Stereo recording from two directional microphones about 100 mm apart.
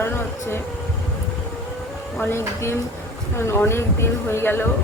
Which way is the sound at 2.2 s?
25° left (ahead or behind).